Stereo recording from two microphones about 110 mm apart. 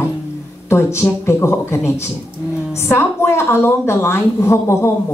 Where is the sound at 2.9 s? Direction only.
25° left (ahead or behind).